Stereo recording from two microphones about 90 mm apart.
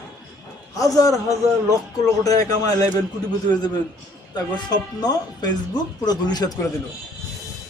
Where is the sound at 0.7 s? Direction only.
40° left (ahead or behind).